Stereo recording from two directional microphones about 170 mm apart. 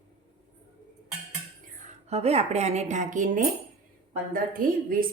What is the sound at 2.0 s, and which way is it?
A woman's voice, 40° right (ahead or behind).